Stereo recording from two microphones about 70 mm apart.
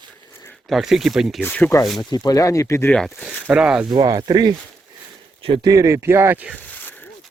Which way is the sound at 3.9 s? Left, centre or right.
Right.